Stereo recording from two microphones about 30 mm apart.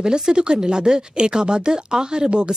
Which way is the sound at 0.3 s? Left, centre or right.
Right.